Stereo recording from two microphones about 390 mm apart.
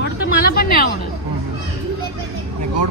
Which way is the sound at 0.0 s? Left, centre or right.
Left.